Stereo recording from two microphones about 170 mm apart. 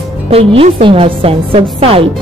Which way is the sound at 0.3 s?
35° right (ahead or behind).